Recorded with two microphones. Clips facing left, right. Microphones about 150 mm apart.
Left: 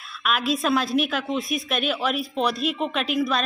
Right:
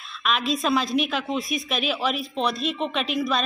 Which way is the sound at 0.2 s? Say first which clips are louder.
Left 1 dB; 5° left (ahead or behind).